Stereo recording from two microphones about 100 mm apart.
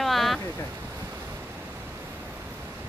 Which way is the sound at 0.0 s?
Centre (ahead or behind).